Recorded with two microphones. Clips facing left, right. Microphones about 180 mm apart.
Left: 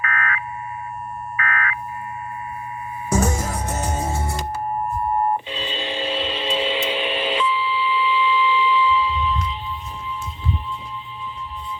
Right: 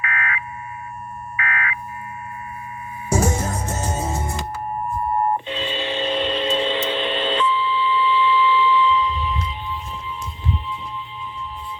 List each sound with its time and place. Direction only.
0.0 s fire alarm: 45° left (ahead or behind)
1.5 s fire alarm: 45° left (ahead or behind)
3.7 s music: 25° right (ahead or behind)
5.5 s a sound: 15° left (ahead or behind)